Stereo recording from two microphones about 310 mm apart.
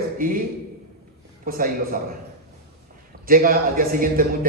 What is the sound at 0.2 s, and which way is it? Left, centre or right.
Speech, right.